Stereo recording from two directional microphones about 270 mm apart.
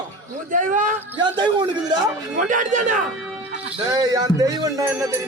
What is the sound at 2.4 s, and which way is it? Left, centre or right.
Speech, right.